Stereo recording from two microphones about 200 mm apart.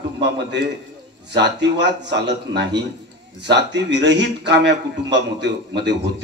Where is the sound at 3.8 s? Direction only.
60° right (ahead or behind).